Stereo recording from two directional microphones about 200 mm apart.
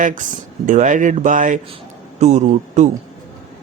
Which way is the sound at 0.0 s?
40° right (ahead or behind).